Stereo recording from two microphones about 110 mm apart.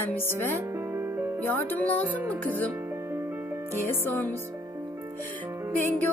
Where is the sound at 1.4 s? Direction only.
15° left (ahead or behind).